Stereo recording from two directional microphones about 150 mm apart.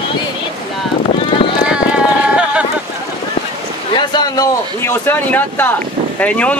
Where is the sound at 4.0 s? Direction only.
25° left (ahead or behind); by 6.6 s 10° left (ahead or behind).